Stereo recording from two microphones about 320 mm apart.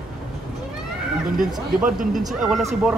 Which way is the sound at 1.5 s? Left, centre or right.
Centre.